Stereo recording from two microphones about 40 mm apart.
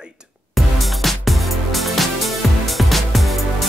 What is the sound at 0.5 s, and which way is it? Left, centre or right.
Music, centre.